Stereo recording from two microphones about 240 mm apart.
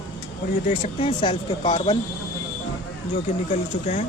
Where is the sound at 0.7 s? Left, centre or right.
Left.